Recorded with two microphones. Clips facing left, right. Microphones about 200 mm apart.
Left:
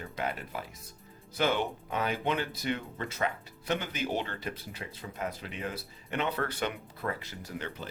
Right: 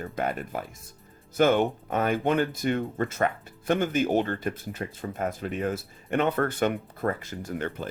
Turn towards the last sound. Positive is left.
turn(degrees=-50)  # may be behind; listen again after turning